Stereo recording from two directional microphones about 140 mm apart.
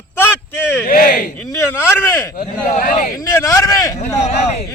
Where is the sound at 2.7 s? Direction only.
60° left (ahead or behind).